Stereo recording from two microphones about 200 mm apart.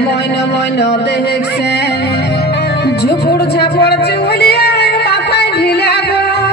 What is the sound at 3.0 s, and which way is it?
Music, 55° left (ahead or behind).